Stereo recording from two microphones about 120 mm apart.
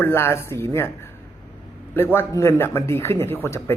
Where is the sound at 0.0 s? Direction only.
20° left (ahead or behind).